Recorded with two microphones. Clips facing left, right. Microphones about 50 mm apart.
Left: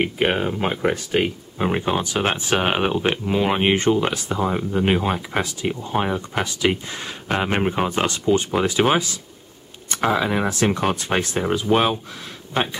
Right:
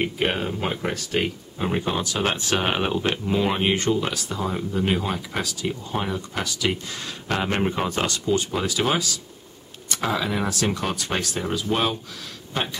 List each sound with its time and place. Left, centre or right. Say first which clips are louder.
0.0 s speech: left 4 dB; centre